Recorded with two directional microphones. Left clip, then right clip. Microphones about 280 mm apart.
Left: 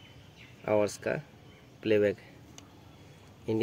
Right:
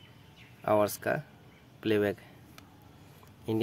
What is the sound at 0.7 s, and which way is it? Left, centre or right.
Speech, right.